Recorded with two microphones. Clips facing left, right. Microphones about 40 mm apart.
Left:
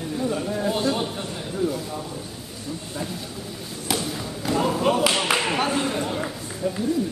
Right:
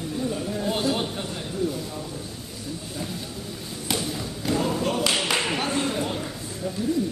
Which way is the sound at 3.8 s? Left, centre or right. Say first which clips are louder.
Left 1 dB; centre.